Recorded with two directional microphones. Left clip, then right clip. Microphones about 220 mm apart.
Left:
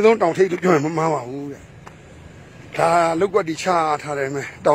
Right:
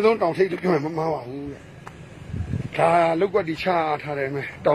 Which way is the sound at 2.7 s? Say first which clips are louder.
Left 2 dB; 25° left (ahead or behind).